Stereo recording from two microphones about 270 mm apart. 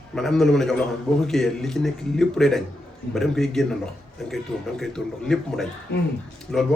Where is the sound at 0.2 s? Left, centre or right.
Centre.